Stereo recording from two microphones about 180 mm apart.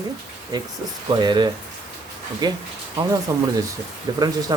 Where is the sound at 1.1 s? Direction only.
25° right (ahead or behind).